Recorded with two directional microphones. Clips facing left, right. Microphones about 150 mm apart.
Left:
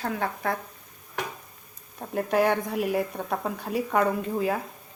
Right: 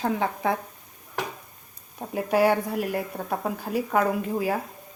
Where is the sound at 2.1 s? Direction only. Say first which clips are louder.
Right 2 dB; 5° right (ahead or behind).